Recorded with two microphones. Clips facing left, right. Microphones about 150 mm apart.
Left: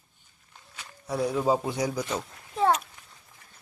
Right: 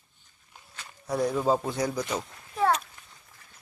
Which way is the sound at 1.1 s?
5° left (ahead or behind).